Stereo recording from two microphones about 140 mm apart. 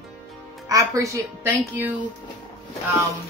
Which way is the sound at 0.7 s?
25° right (ahead or behind).